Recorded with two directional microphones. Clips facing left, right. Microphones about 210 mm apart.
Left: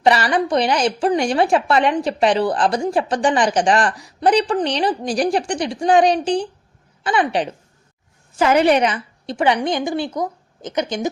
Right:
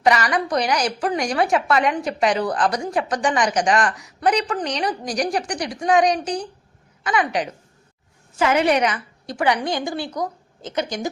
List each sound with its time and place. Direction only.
0.0 s a woman's voice: 30° left (ahead or behind)